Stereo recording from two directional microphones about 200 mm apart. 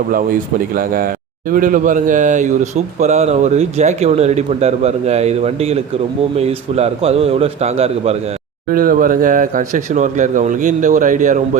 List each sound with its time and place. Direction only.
0.7 s speech: 45° right (ahead or behind)
8.7 s speech: 45° right (ahead or behind)